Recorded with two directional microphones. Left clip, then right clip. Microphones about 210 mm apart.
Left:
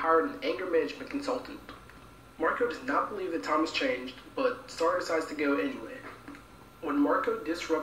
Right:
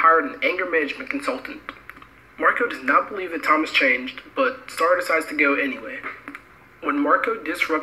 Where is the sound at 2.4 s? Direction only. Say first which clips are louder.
Right 9 dB; 45° right (ahead or behind).